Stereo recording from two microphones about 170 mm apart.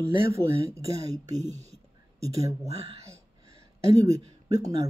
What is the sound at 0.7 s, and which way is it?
Speech, 20° right (ahead or behind).